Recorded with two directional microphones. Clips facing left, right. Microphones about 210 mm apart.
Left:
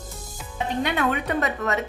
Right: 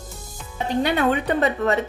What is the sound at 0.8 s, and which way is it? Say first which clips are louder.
Speech: right 4 dB; 30° right (ahead or behind).